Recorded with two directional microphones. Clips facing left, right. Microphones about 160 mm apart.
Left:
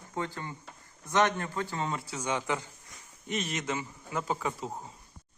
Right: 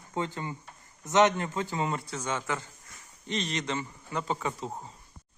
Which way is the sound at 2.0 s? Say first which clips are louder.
Left 1 dB; 10° left (ahead or behind).